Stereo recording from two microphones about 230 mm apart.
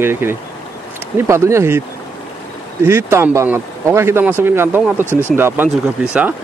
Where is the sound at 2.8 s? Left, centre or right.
Centre.